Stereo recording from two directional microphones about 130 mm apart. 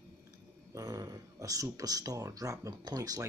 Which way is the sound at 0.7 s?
25° right (ahead or behind).